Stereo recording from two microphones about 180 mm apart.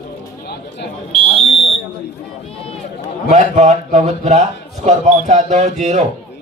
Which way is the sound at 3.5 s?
40° right (ahead or behind).